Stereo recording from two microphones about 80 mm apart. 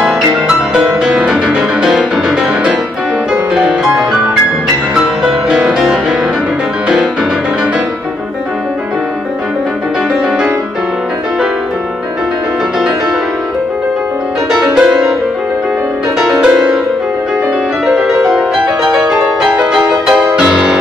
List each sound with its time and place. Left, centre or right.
0.0 s music: centre
14.5 s music: centre
16.2 s music: centre
17.8 s music: centre